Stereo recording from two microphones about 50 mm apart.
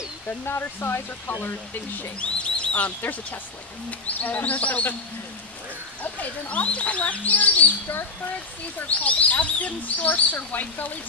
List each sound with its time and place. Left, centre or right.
0.5 s speech: left
2.1 s speech: left
4.2 s speech: left
6.0 s speech: left